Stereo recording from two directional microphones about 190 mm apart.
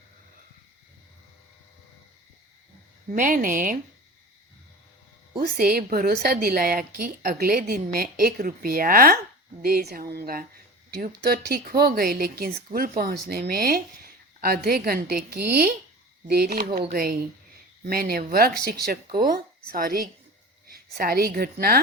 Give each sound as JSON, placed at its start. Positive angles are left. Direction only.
{"t": 3.1, "sound": "a woman's voice", "side_deg": -45}
{"t": 5.4, "sound": "a woman's voice", "side_deg": -50}